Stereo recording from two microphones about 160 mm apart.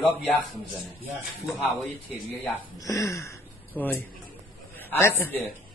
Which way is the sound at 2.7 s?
20° left (ahead or behind).